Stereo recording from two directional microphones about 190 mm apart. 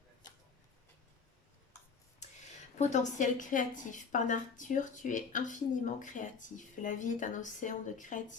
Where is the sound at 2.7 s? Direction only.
40° left (ahead or behind).